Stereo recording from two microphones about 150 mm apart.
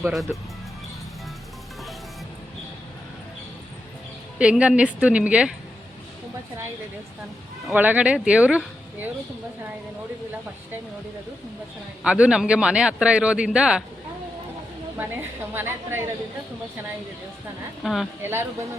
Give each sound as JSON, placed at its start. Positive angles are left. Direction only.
{"t": 0.1, "sound": "a woman's voice", "side_deg": 0}
{"t": 4.4, "sound": "speech", "side_deg": -5}
{"t": 7.7, "sound": "speech", "side_deg": -10}
{"t": 12.0, "sound": "speech", "side_deg": -5}
{"t": 15.5, "sound": "speech", "side_deg": -15}
{"t": 17.8, "sound": "a woman's voice", "side_deg": 0}
{"t": 18.2, "sound": "speech", "side_deg": -15}